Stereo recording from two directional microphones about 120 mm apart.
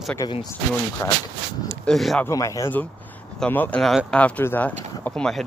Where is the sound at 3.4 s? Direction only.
15° left (ahead or behind).